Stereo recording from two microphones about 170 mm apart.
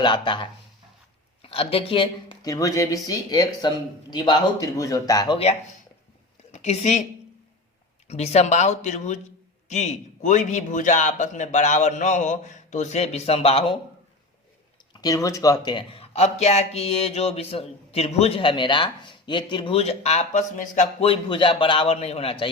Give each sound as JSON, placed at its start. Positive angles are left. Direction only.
{"t": 0.0, "sound": "speech", "side_deg": 30}
{"t": 6.5, "sound": "a woman's voice", "side_deg": 40}
{"t": 8.0, "sound": "a man's voice", "side_deg": 40}
{"t": 15.0, "sound": "speech", "side_deg": 20}
{"t": 21.1, "sound": "speech", "side_deg": 30}